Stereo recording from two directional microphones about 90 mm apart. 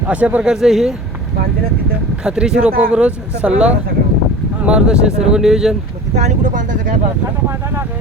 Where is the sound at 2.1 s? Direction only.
10° right (ahead or behind).